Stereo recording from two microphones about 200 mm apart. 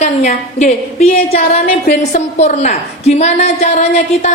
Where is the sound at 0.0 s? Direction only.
35° left (ahead or behind).